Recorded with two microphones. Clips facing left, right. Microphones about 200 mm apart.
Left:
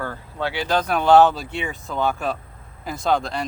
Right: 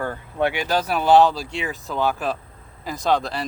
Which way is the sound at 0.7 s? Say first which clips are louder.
Left 2 dB; 5° right (ahead or behind).